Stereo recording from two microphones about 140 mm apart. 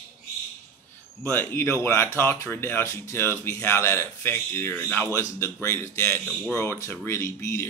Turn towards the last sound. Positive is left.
turn(degrees=20)  # may be behind; listen again after turning